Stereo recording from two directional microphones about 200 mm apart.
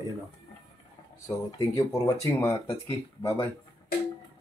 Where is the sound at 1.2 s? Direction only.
15° left (ahead or behind).